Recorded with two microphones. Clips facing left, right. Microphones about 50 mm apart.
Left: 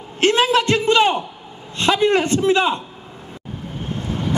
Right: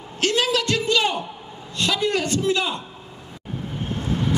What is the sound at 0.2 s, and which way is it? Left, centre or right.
A man's voice, left.